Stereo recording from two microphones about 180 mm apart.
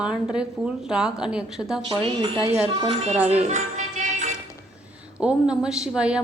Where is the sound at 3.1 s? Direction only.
10° right (ahead or behind).